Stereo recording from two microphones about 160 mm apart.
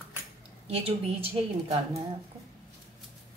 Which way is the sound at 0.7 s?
40° right (ahead or behind).